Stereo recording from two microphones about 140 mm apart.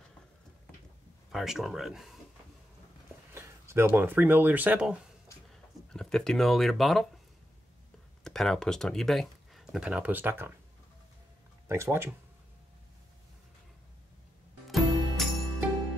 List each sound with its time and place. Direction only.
1.3 s speech: centre (ahead or behind)
3.3 s speech: 20° right (ahead or behind)
5.5 s speech: 5° left (ahead or behind)
8.2 s speech: 5° left (ahead or behind); by 10.5 s 15° right (ahead or behind)
11.6 s speech: 20° right (ahead or behind)
14.7 s music: centre (ahead or behind)